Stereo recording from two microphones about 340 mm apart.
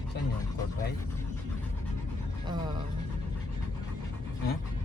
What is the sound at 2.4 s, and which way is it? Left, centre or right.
Music, centre.